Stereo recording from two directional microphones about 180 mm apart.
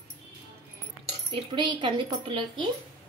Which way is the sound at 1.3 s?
25° right (ahead or behind).